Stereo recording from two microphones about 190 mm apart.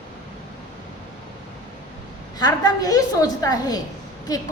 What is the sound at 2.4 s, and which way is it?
A woman's voice, 20° left (ahead or behind).